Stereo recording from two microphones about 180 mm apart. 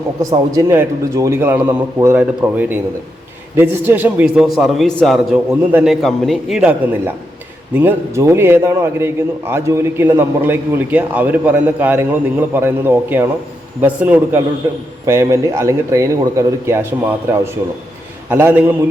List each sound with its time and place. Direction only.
0.2 s a man's voice: 20° right (ahead or behind)